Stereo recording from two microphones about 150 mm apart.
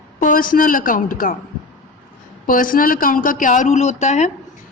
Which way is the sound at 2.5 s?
70° left (ahead or behind).